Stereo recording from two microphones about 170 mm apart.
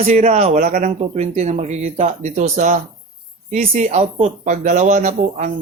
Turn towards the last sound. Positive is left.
turn(degrees=-50)  # may be behind; listen again after turning